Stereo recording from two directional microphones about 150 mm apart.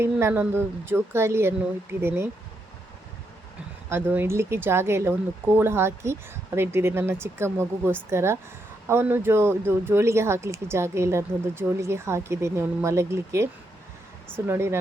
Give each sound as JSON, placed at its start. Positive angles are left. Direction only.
{"t": 0.0, "sound": "speech", "side_deg": -15}
{"t": 3.8, "sound": "speech", "side_deg": -15}